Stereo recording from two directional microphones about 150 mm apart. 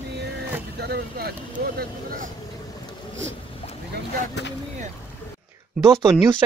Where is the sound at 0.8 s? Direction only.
90° right.